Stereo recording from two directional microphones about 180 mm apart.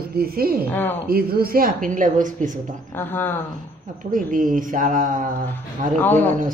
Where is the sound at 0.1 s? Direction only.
55° right (ahead or behind).